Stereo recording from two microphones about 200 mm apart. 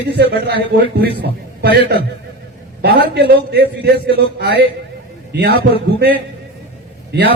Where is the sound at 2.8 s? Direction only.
55° right (ahead or behind).